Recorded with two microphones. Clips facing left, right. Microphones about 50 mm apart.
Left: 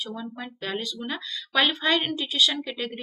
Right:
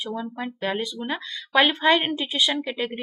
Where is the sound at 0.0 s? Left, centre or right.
Right.